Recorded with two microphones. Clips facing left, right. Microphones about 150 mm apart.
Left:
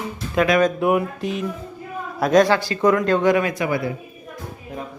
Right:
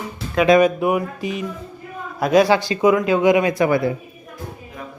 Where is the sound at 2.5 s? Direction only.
20° right (ahead or behind).